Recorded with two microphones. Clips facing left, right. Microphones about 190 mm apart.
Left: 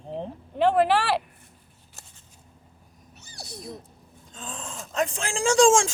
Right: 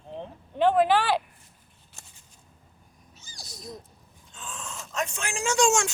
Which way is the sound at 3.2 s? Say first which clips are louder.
Left 5 dB; 65° left (ahead or behind).